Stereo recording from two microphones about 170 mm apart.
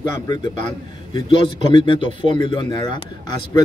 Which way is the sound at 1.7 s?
30° left (ahead or behind).